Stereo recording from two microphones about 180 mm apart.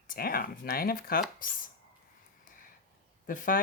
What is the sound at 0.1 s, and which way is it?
Speech, 55° left (ahead or behind).